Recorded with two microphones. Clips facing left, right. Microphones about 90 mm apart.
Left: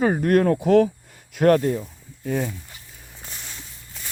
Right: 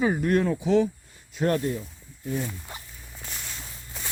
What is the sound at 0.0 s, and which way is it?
Speech, 50° left (ahead or behind).